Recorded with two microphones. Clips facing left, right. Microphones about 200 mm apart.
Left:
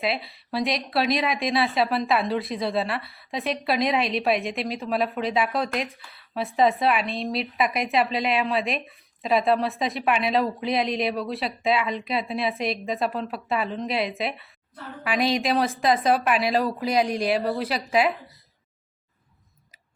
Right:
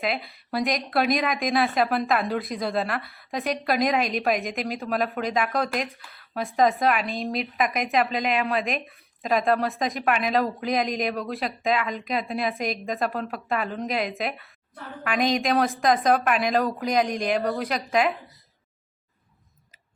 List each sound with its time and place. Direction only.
0.0 s speech: centre (ahead or behind)
0.9 s speech: 50° right (ahead or behind)
1.2 s speech: centre (ahead or behind)
1.7 s speech: 50° right (ahead or behind)
2.3 s a woman's voice: centre (ahead or behind)
10.7 s speech: 45° right (ahead or behind)
11.1 s speech: centre (ahead or behind)